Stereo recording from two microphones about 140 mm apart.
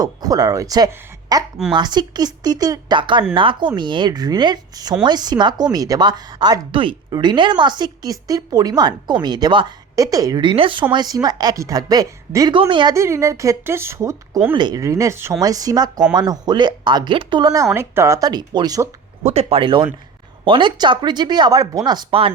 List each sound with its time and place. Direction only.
0.0 s speech: 30° right (ahead or behind)
10.9 s speech: 30° right (ahead or behind)
12.5 s speech: 35° right (ahead or behind)
12.9 s speech: 20° right (ahead or behind)
14.5 s speech: 30° right (ahead or behind)
19.3 s speech: 45° right (ahead or behind); by 21.8 s 25° right (ahead or behind)
21.8 s speech: 35° right (ahead or behind)